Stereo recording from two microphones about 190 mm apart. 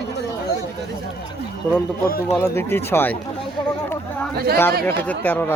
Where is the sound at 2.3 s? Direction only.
10° left (ahead or behind).